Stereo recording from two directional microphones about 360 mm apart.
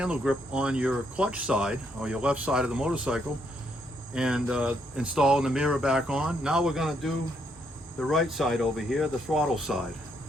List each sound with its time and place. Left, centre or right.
0.0 s speech: centre